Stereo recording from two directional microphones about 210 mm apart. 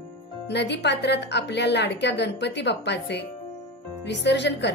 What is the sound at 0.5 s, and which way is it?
Speech, 55° left (ahead or behind).